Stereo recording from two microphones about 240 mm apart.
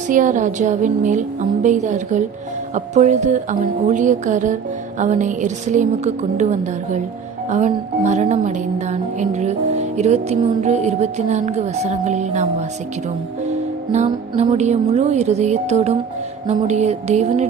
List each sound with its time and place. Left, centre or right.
0.1 s a woman's voice: right
7.5 s music: right
13.5 s music: right